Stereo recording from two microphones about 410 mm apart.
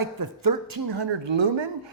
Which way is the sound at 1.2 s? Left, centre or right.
Right.